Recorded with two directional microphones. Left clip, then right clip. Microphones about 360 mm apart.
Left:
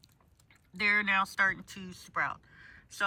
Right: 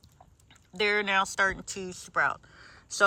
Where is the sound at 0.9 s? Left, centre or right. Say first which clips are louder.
Right 2 dB; centre.